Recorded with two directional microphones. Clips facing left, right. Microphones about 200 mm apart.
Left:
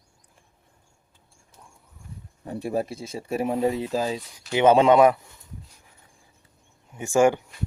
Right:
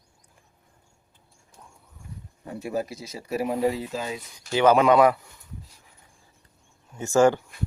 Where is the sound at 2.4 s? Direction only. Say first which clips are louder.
Left 2 dB; 30° left (ahead or behind).